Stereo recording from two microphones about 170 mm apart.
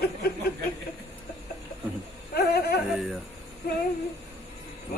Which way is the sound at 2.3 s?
65° left (ahead or behind).